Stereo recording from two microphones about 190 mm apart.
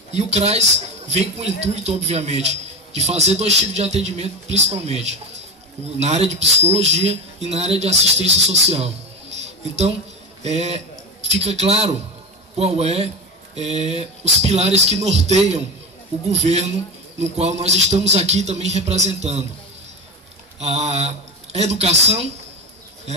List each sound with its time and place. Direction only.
0.1 s a man's voice: 35° right (ahead or behind)
10.4 s a man's voice: 35° right (ahead or behind)
20.5 s a man's voice: 35° right (ahead or behind)